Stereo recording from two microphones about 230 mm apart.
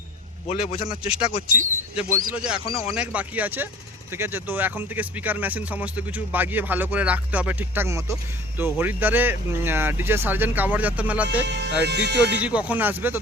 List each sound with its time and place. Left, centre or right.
0.4 s a man's voice: left
1.5 s speech: centre
2.6 s a man's voice: left
2.9 s speech: centre
11.4 s speech: right
12.4 s speech: centre